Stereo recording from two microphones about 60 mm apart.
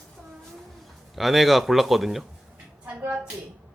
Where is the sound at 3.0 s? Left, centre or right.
Right.